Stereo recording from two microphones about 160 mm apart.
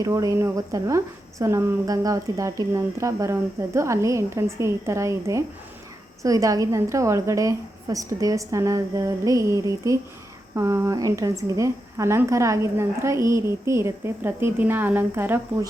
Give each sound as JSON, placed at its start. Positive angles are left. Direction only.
{"t": 0.0, "sound": "a woman's voice", "side_deg": -20}